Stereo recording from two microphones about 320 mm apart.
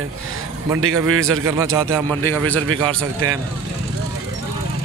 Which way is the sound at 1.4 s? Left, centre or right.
Centre.